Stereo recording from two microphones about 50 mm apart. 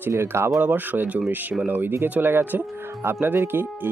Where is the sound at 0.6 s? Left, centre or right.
Right.